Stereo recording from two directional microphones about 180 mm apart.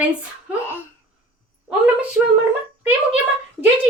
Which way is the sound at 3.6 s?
5° right (ahead or behind).